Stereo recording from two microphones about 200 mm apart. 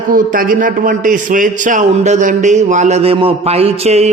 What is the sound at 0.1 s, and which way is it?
A man's voice, 45° right (ahead or behind).